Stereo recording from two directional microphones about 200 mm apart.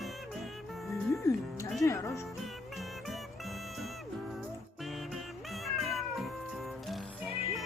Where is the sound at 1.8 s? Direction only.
15° left (ahead or behind).